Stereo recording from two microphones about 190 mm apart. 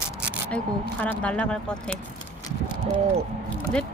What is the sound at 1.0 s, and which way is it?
Speech, 5° left (ahead or behind).